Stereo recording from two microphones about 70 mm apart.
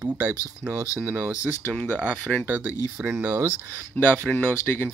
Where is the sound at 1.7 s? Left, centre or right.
Centre.